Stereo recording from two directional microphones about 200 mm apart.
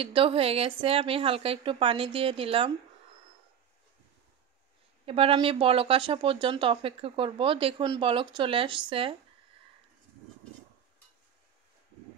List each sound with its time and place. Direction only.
0.0 s speech: 25° right (ahead or behind)
5.0 s speech: 30° right (ahead or behind)